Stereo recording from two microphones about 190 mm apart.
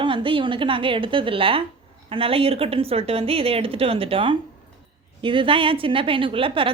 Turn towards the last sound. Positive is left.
turn(degrees=-30)  # may be behind; listen again after turning